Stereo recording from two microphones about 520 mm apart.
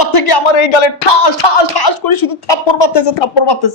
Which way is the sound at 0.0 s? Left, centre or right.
Left.